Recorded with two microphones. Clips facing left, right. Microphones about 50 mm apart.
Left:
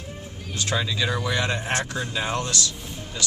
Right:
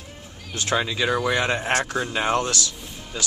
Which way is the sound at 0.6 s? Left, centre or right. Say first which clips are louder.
Right 2 dB; right.